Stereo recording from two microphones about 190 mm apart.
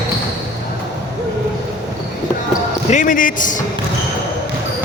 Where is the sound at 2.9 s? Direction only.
45° left (ahead or behind).